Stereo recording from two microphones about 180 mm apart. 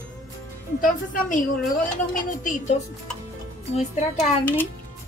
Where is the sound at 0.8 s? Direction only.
50° left (ahead or behind).